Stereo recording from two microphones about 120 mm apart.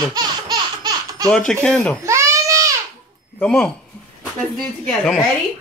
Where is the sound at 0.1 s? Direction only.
30° right (ahead or behind).